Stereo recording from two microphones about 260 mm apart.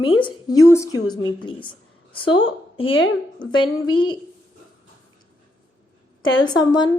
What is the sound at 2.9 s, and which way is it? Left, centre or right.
Speech, left.